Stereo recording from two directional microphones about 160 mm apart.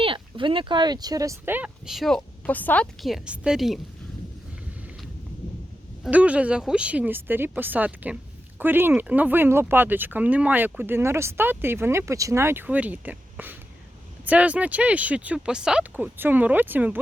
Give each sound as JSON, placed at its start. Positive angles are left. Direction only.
{"t": 0.0, "sound": "speech", "side_deg": -30}
{"t": 3.0, "sound": "a woman's voice", "side_deg": 0}
{"t": 6.0, "sound": "speech", "side_deg": -10}